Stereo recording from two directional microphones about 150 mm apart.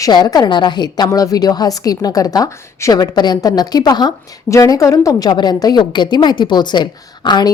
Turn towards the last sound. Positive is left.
turn(degrees=30)  # may be behind; listen again after turning